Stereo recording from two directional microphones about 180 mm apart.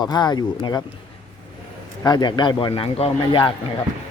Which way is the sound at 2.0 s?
25° left (ahead or behind).